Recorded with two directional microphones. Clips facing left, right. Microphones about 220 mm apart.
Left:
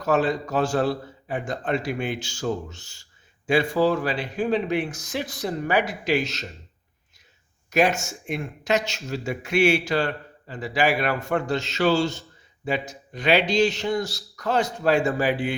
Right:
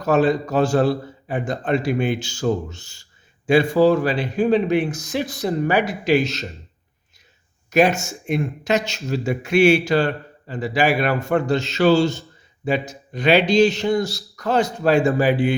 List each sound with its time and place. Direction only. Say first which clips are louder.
0.1 s a man's voice: right 5 dB; 35° right (ahead or behind)
7.7 s a man's voice: right 4 dB; 30° right (ahead or behind)